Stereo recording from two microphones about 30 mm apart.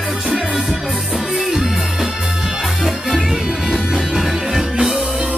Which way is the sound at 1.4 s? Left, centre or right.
Centre.